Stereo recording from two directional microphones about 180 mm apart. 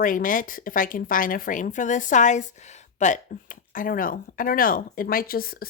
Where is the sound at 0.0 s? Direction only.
50° left (ahead or behind).